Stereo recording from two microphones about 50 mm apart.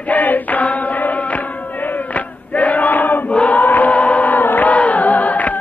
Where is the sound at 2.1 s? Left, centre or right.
Left.